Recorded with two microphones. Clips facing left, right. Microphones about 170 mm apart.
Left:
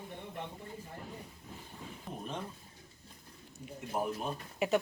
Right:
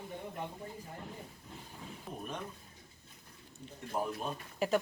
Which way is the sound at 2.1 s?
Centre (ahead or behind).